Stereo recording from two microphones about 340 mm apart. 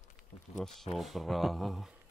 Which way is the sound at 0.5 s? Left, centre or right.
Centre.